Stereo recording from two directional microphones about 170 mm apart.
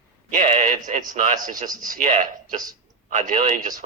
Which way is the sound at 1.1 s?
45° right (ahead or behind).